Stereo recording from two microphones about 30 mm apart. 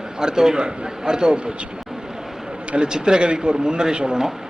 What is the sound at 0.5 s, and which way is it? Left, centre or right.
Speech, right.